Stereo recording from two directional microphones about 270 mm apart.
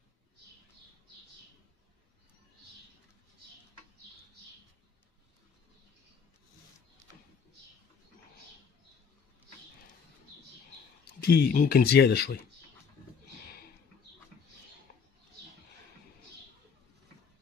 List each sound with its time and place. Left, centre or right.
11.2 s speech: left